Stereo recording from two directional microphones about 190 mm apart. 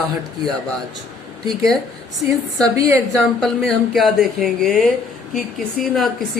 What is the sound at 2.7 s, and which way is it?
Speech, 15° right (ahead or behind).